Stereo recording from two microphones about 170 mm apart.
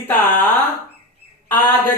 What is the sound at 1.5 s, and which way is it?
Speech, 10° left (ahead or behind).